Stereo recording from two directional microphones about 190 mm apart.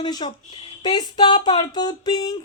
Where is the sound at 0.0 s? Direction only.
25° left (ahead or behind).